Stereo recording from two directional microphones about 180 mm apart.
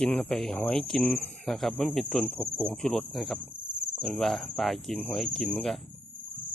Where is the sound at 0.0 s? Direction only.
5° left (ahead or behind).